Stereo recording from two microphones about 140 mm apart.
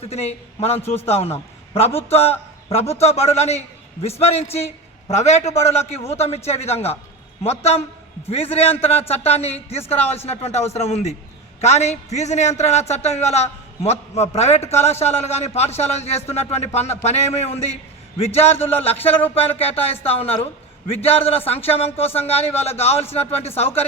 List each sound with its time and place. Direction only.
0.1 s a man's voice: 50° left (ahead or behind)
0.8 s speech: 15° left (ahead or behind)
1.0 s a man's voice: 45° left (ahead or behind)
18.5 s speech: 15° left (ahead or behind)
18.8 s a man's voice: 45° left (ahead or behind)
19.4 s speech: 15° left (ahead or behind)
19.6 s a man's voice: 45° left (ahead or behind)